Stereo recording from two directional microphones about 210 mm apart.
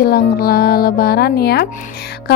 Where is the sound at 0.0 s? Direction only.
45° left (ahead or behind).